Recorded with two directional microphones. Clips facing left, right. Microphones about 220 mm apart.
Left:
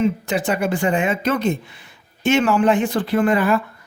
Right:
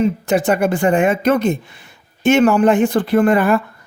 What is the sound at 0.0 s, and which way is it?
Speech, 50° right (ahead or behind).